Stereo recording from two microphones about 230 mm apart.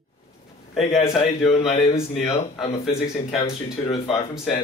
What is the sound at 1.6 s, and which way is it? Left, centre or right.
A man's voice, left.